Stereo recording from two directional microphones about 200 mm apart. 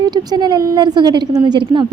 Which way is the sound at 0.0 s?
20° right (ahead or behind).